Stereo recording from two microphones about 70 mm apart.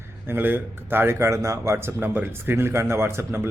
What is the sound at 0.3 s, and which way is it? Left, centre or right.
Speech, right.